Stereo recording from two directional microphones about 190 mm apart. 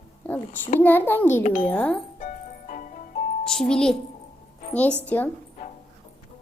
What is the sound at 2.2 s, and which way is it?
Music, 45° left (ahead or behind).